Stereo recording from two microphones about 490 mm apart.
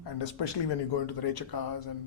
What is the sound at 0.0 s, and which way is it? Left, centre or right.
Speech, left.